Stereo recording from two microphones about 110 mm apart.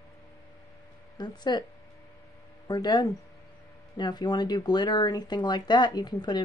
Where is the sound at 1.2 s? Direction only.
40° left (ahead or behind).